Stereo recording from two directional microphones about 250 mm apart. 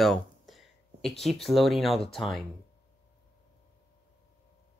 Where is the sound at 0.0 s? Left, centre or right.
Centre.